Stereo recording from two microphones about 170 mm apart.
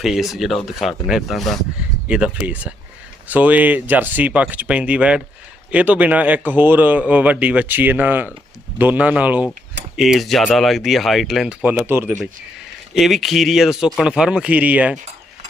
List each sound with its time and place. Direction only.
0.0 s speech: centre (ahead or behind)
12.9 s speech: centre (ahead or behind)